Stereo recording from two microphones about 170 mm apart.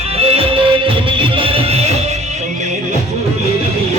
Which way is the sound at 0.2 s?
35° right (ahead or behind).